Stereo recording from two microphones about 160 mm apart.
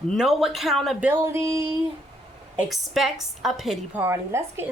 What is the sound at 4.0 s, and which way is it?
Speech, 15° right (ahead or behind).